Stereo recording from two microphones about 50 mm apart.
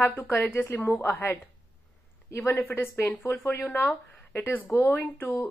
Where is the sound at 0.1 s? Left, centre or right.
Left.